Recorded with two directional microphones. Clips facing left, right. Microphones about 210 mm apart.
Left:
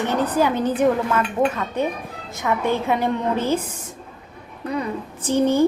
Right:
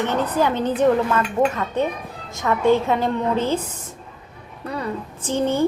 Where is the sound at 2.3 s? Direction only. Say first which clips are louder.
Right 4 dB; 15° left (ahead or behind).